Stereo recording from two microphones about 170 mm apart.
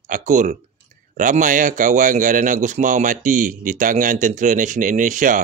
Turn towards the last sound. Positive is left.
turn(degrees=-50)  # may be behind; listen again after turning